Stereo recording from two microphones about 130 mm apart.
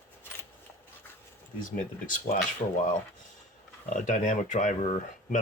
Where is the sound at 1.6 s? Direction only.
90° left.